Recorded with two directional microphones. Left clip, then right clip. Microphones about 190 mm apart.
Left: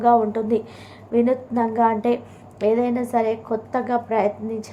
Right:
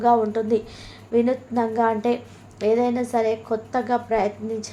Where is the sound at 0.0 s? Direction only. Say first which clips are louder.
Left 2 dB; 30° left (ahead or behind).